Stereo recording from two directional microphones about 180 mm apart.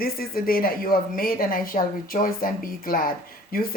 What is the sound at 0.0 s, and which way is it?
Speech, 55° left (ahead or behind).